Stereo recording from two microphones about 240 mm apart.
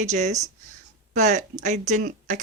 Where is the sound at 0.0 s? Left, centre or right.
Right.